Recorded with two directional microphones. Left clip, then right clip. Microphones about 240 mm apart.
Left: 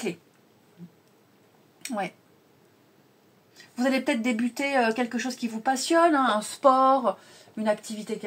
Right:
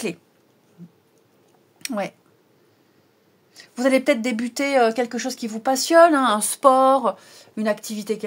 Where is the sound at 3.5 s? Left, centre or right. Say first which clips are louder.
Right 7 dB; right.